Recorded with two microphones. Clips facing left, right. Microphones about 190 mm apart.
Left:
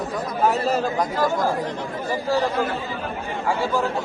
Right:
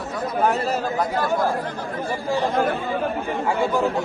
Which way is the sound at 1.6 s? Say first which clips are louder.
Even; 20° left (ahead or behind).